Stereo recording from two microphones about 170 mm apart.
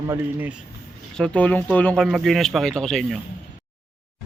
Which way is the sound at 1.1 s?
5° left (ahead or behind).